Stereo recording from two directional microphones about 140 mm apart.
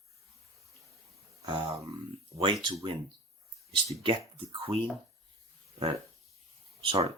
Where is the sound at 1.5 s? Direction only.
35° right (ahead or behind).